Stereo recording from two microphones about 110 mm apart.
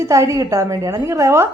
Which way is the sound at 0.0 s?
30° right (ahead or behind).